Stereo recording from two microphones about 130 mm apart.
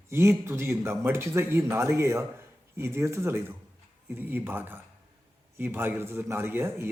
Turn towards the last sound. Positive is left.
turn(degrees=-20)  # may be behind; listen again after turning